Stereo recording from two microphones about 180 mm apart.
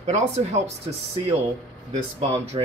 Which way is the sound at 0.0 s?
35° right (ahead or behind).